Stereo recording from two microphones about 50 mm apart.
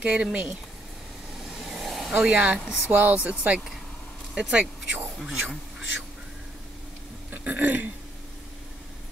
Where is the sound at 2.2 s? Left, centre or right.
Right.